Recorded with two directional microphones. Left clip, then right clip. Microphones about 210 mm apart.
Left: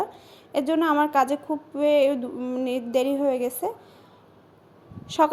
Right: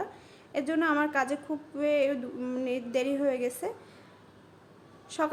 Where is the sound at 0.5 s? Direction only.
20° left (ahead or behind).